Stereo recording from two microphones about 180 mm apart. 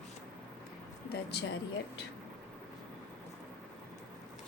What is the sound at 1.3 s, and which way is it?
Speech, 65° left (ahead or behind).